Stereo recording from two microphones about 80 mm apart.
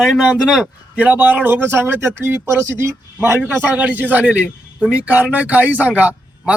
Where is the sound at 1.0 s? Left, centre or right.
Right.